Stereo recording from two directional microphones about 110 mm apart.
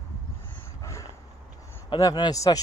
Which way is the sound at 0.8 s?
25° left (ahead or behind).